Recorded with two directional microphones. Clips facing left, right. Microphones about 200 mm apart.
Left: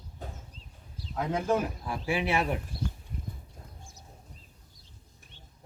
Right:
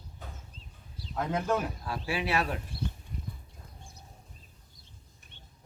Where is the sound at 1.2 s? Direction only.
10° left (ahead or behind).